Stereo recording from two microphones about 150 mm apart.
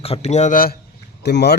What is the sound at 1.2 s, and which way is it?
Speech, 90° left.